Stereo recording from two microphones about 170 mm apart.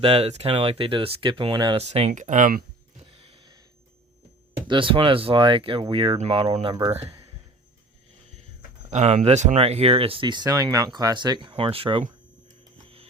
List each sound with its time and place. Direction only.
0.0 s speech: 35° right (ahead or behind); by 2.6 s 55° right (ahead or behind)
3.1 s a sound: 35° right (ahead or behind)
4.7 s speech: 30° right (ahead or behind)
6.7 s speech: 20° right (ahead or behind)
8.9 s speech: 45° right (ahead or behind)